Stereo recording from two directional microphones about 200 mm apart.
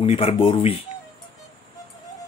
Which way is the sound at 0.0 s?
30° left (ahead or behind).